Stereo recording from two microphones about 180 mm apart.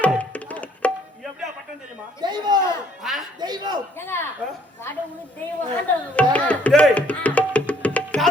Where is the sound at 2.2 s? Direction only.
25° right (ahead or behind).